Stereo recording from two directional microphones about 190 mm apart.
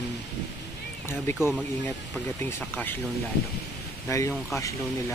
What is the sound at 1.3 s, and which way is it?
Speech, 15° left (ahead or behind).